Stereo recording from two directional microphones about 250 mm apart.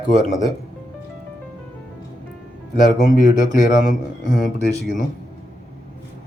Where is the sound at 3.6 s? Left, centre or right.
Left.